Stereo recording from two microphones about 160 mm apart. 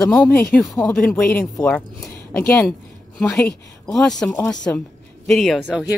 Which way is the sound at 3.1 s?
5° left (ahead or behind).